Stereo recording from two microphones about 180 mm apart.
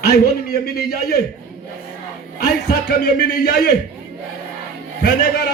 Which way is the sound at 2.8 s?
65° left (ahead or behind).